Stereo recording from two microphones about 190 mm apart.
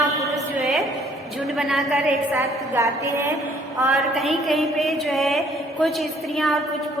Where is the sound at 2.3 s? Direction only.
15° right (ahead or behind).